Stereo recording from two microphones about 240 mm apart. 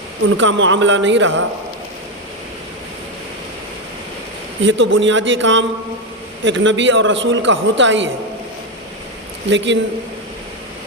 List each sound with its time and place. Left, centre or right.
0.3 s a man's voice: right
4.6 s a man's voice: right
9.5 s a man's voice: right